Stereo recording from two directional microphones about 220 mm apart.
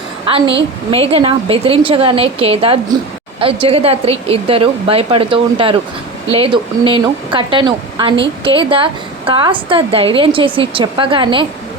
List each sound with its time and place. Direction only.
0.3 s a woman's voice: 25° right (ahead or behind)